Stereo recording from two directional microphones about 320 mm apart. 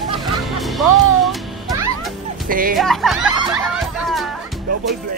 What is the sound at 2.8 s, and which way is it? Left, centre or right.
Speech, centre.